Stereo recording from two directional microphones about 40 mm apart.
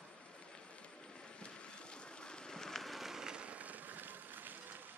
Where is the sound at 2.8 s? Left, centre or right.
Centre.